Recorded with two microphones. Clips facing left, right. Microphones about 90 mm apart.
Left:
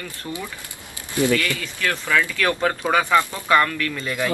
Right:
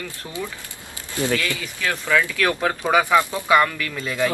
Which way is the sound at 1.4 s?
15° right (ahead or behind).